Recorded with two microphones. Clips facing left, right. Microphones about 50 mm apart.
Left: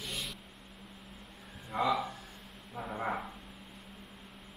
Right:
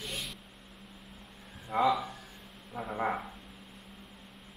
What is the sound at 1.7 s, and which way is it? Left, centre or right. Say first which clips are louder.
Speech: right 3 dB; centre.